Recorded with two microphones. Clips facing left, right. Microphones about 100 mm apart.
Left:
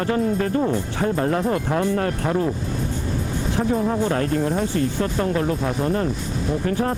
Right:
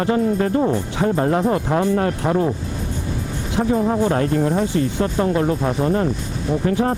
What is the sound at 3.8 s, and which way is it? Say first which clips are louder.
Speech: right 3 dB; 20° right (ahead or behind).